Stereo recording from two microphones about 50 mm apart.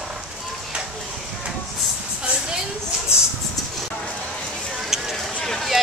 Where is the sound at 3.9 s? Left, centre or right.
Left.